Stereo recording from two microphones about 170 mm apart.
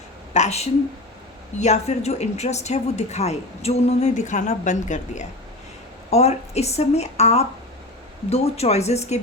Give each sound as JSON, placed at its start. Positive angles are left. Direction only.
{"t": 0.3, "sound": "speech", "side_deg": 40}